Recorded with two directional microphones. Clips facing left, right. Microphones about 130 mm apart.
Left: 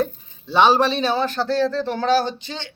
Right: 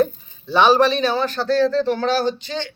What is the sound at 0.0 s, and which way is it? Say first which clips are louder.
Speech: right 4 dB; 25° left (ahead or behind).